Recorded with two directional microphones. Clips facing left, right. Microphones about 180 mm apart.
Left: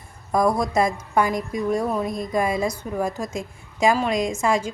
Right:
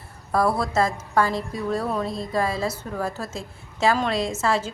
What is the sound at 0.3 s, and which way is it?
A woman's voice, 15° left (ahead or behind).